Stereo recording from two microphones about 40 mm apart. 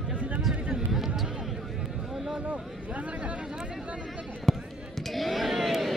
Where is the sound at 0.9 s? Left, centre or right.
Centre.